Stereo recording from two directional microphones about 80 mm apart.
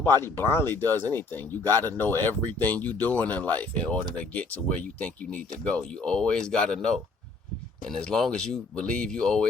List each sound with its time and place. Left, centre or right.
0.0 s speech: left; by 9.5 s centre